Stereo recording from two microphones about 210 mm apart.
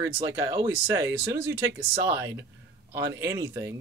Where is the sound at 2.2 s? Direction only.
15° right (ahead or behind).